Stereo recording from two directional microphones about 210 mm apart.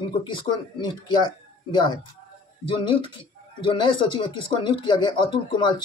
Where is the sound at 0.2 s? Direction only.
20° left (ahead or behind).